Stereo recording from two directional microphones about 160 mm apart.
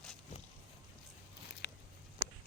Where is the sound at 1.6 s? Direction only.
90° left.